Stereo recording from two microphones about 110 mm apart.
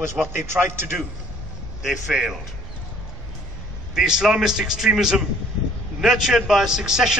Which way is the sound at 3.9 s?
5° right (ahead or behind).